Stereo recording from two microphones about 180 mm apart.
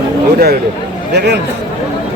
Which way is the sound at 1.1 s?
65° right (ahead or behind).